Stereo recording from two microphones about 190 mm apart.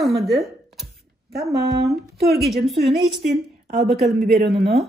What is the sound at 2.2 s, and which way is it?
Speech, 60° right (ahead or behind).